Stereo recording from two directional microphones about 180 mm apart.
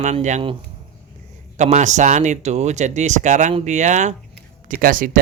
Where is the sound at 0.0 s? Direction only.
40° right (ahead or behind).